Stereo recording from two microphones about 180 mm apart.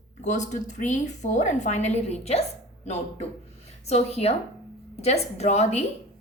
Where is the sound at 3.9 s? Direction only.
35° left (ahead or behind).